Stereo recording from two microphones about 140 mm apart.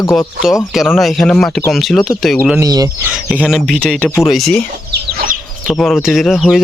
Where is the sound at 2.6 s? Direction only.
25° right (ahead or behind).